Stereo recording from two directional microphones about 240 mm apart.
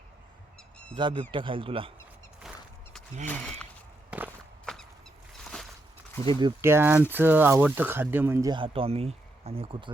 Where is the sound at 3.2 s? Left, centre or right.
Centre.